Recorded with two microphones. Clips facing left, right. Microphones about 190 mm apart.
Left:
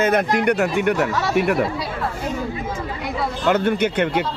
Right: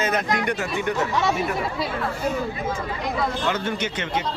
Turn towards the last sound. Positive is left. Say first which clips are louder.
# left 7 dB
turn(degrees=60)  # may be behind; listen again after turning